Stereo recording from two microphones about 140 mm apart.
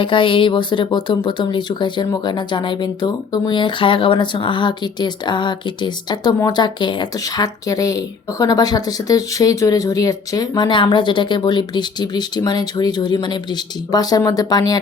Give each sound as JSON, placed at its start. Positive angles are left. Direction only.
{"t": 0.0, "sound": "speech", "side_deg": 40}